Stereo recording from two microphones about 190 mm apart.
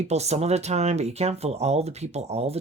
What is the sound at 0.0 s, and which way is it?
Speech, 35° right (ahead or behind).